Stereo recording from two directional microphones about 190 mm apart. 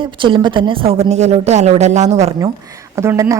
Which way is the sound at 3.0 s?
15° right (ahead or behind).